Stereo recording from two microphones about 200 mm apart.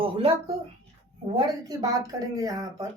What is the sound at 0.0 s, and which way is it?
Speech, 25° right (ahead or behind).